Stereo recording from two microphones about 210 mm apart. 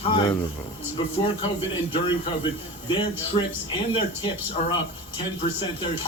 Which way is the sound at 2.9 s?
25° left (ahead or behind).